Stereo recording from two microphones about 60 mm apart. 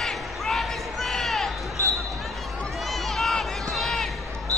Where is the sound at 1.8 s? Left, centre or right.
Left.